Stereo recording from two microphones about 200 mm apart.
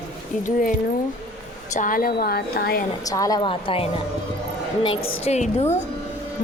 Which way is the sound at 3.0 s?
15° left (ahead or behind).